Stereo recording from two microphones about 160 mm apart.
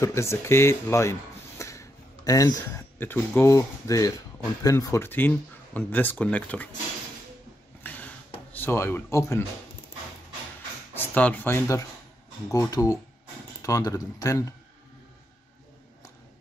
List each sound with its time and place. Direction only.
0.0 s speech: 15° left (ahead or behind)
7.8 s a sound: 10° left (ahead or behind)
8.5 s speech: 15° left (ahead or behind)
11.0 s speech: 10° left (ahead or behind)